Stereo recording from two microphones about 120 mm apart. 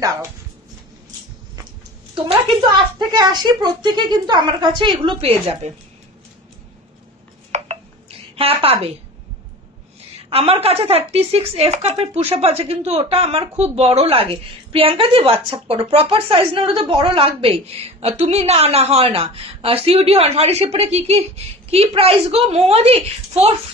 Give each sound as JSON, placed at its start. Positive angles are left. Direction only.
{"t": 0.0, "sound": "speech", "side_deg": -30}
{"t": 2.1, "sound": "speech", "side_deg": -45}
{"t": 7.5, "sound": "dishes", "side_deg": -70}
{"t": 8.4, "sound": "a woman's voice", "side_deg": -55}
{"t": 10.3, "sound": "speech", "side_deg": -55}